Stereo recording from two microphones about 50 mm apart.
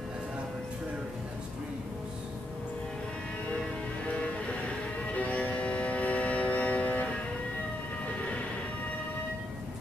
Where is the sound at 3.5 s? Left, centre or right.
Left.